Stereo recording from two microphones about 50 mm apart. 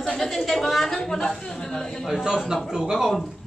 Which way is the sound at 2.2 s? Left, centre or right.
Centre.